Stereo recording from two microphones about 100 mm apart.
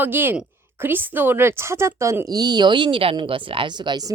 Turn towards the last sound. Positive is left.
turn(degrees=-45)  # may be behind; listen again after turning